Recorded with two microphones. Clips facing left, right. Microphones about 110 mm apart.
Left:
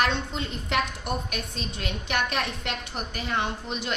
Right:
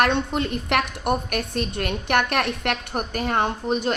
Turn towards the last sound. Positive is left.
turn(degrees=-45)  # may be behind; listen again after turning